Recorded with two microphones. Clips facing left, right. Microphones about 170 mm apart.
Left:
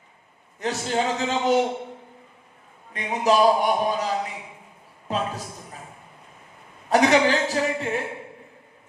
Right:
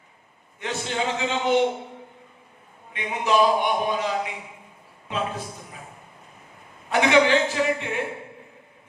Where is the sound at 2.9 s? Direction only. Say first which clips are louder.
Left 2 dB; 40° left (ahead or behind).